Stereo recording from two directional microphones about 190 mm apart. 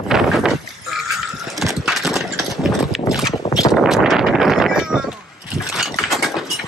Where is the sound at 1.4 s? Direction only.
Centre (ahead or behind).